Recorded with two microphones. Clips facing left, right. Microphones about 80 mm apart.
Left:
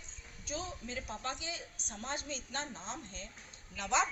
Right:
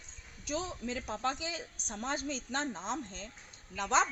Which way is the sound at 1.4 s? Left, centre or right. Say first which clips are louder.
Right 4 dB; right.